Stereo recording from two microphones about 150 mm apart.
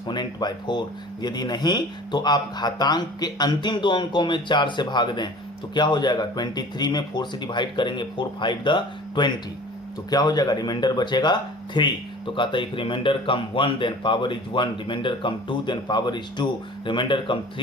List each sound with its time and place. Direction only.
0.1 s speech: 30° left (ahead or behind)